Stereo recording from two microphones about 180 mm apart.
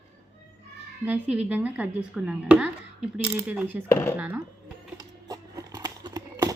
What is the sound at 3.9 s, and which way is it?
Speech, 10° left (ahead or behind).